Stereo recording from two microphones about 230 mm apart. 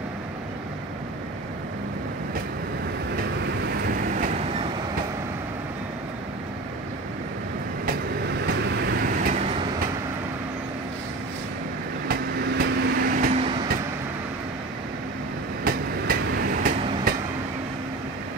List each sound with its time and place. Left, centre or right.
3.8 s train: right
7.8 s vehicle: right
12.1 s vehicle: right
15.6 s train: right